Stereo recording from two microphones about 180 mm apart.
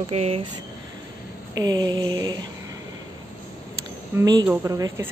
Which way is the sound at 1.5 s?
20° right (ahead or behind).